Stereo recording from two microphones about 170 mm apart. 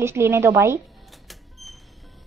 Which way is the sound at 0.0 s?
15° right (ahead or behind).